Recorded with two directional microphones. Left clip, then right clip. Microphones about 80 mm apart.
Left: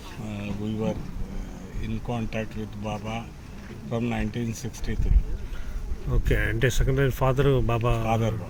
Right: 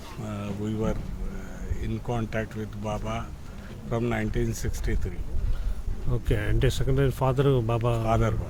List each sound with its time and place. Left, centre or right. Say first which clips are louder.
0.3 s a sound: right 1 dB; right
2.0 s speech: right 1 dB; right
6.1 s speech: left 3 dB; right